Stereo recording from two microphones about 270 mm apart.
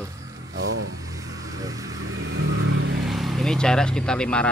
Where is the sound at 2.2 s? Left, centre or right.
Right.